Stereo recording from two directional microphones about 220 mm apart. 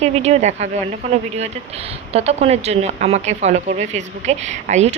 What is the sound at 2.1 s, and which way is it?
A woman's voice, 30° right (ahead or behind).